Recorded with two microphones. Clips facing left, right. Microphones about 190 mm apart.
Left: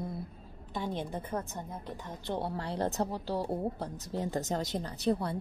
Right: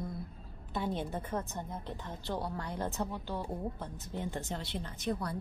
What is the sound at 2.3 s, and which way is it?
A woman's voice, 30° left (ahead or behind).